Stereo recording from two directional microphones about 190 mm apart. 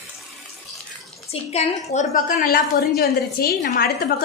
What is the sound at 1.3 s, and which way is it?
A woman's voice, 35° left (ahead or behind).